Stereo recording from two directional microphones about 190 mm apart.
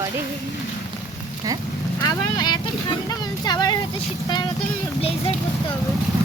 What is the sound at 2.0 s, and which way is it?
Vehicle, 20° left (ahead or behind).